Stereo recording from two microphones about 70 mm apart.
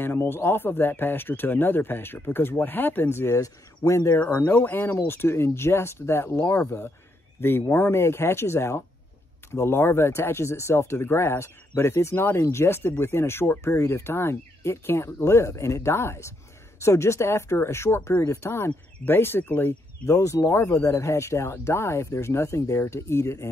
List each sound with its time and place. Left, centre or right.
0.0 s speech: left
3.3 s speech: left
4.2 s speech: left
20.1 s speech: left